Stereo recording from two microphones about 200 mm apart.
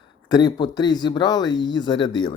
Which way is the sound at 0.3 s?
20° left (ahead or behind).